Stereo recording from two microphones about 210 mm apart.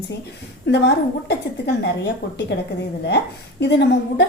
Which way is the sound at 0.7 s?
55° left (ahead or behind).